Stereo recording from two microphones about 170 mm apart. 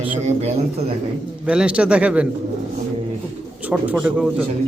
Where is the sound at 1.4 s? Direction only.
5° right (ahead or behind).